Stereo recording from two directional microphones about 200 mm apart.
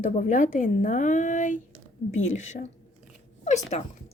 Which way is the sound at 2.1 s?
75° left (ahead or behind).